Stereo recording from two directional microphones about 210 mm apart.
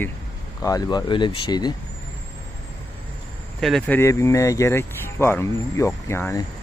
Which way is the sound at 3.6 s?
Centre (ahead or behind).